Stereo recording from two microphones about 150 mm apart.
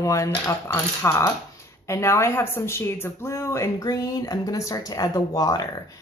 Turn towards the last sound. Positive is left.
turn(degrees=25)  # may be behind; listen again after turning